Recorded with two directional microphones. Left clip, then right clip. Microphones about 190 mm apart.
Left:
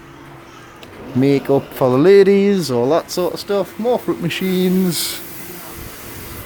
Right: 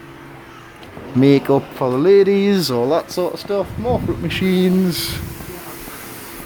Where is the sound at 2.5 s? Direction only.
Centre (ahead or behind).